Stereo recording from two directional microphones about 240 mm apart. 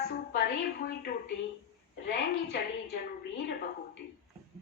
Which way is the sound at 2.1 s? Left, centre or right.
Left.